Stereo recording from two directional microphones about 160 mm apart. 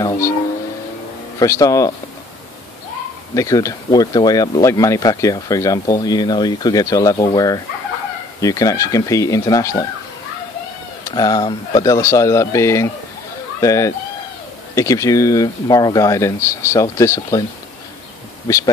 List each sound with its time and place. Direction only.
1.4 s speech: 20° left (ahead or behind)
3.3 s speech: 20° left (ahead or behind)
11.1 s speech: 25° left (ahead or behind)